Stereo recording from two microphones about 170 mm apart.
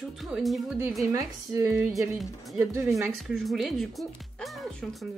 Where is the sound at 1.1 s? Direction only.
20° right (ahead or behind).